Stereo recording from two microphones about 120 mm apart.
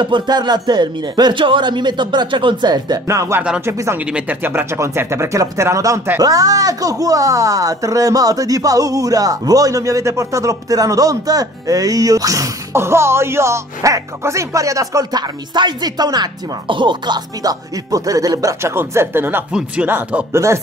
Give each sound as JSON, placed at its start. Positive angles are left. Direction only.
{"t": 0.0, "sound": "speech", "side_deg": -40}
{"t": 4.0, "sound": "speech", "side_deg": -10}